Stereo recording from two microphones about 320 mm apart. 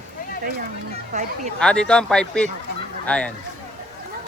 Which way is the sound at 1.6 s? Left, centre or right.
Centre.